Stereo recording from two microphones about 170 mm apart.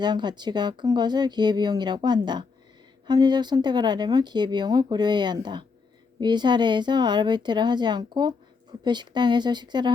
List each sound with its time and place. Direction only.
0.0 s speech: 25° right (ahead or behind)